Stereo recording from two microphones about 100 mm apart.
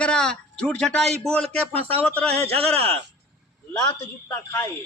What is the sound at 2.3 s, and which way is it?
Speech, 90° right.